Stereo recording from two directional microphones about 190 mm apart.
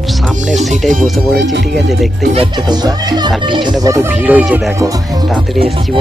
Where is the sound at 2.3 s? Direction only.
20° right (ahead or behind).